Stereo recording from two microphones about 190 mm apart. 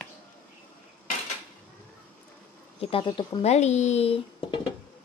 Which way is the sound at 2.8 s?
25° left (ahead or behind).